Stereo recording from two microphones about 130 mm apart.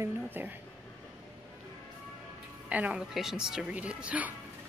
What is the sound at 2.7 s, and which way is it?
Speech, 10° right (ahead or behind).